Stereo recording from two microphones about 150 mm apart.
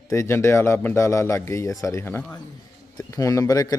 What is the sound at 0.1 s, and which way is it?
A man's voice, 20° left (ahead or behind).